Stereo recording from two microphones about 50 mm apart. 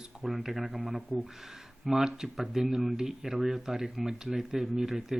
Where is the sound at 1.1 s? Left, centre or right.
Right.